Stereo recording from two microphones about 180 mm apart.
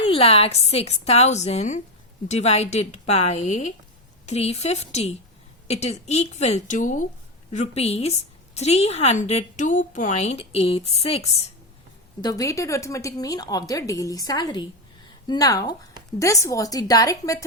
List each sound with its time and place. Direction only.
0.0 s a woman's voice: 30° left (ahead or behind)
12.2 s a woman's voice: 20° left (ahead or behind)